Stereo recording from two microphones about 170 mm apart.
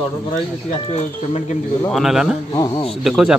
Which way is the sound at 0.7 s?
35° left (ahead or behind).